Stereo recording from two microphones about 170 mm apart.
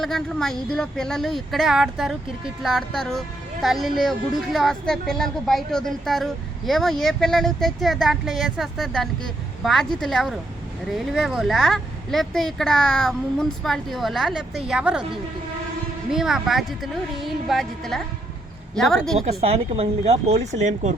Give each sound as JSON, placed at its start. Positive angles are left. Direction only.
{"t": 0.0, "sound": "a woman's voice", "side_deg": 0}
{"t": 16.1, "sound": "a woman's voice", "side_deg": -5}
{"t": 19.2, "sound": "speech", "side_deg": -40}